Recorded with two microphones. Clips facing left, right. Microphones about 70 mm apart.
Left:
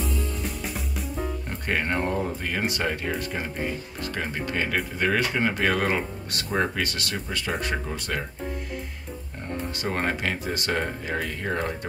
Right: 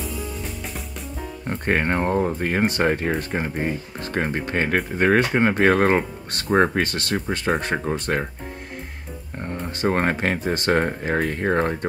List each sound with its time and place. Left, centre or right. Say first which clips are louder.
0.4 s drum kit: even; centre
1.5 s speech: right 7 dB; right
9.4 s speech: right 6 dB; right